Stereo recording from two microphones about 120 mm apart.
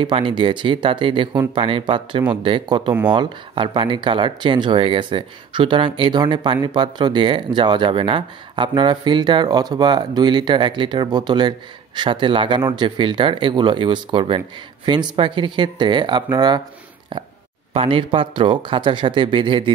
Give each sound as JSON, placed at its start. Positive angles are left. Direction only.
{"t": 0.0, "sound": "speech", "side_deg": -45}
{"t": 17.7, "sound": "speech", "side_deg": -50}